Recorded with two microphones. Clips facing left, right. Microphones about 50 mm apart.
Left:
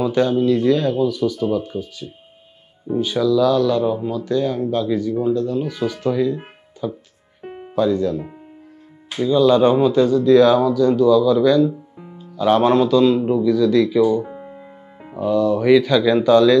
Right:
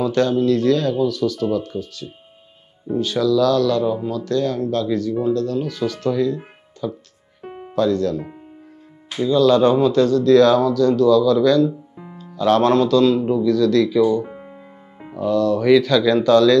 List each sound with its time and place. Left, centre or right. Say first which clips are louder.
0.0 s speech: even; centre
9.3 s speech: even; centre